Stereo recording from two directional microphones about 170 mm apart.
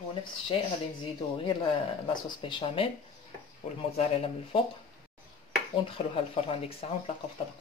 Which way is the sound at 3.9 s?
35° left (ahead or behind).